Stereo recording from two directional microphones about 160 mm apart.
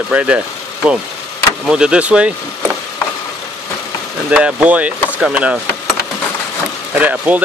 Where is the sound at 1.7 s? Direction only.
5° right (ahead or behind).